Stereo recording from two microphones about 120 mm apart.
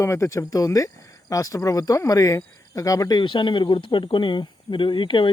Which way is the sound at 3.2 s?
45° left (ahead or behind).